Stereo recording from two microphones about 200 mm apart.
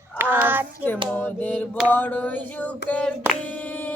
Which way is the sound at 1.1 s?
10° left (ahead or behind).